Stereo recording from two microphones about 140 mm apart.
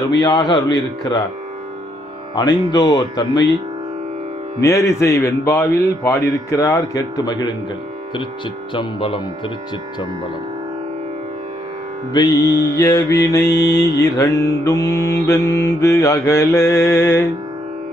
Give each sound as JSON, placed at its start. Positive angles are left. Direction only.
{"t": 0.2, "sound": "mantra", "side_deg": 30}
{"t": 2.3, "sound": "mantra", "side_deg": 30}
{"t": 4.6, "sound": "mantra", "side_deg": 20}
{"t": 8.7, "sound": "speech", "side_deg": 40}
{"t": 12.1, "sound": "mantra", "side_deg": 30}